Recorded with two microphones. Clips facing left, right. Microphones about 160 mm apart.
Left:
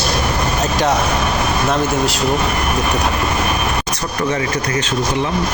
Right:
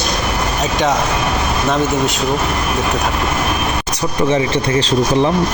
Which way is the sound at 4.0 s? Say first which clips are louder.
Right 8 dB; 20° right (ahead or behind).